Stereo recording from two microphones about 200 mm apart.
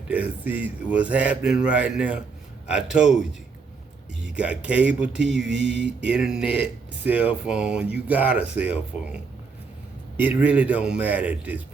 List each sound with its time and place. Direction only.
0.1 s speech: 10° right (ahead or behind)